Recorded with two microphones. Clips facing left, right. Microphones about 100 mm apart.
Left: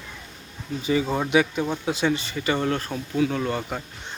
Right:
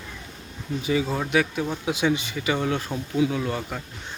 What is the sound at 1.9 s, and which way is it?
Speech, 10° right (ahead or behind).